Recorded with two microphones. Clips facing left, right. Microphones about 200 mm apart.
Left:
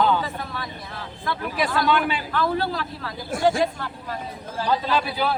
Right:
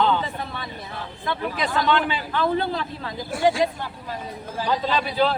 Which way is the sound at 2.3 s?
20° right (ahead or behind).